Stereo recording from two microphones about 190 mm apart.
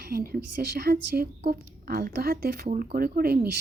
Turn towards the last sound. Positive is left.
turn(degrees=-55)  # may be behind; listen again after turning